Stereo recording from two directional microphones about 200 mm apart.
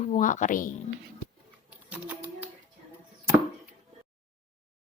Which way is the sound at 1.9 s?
10° right (ahead or behind).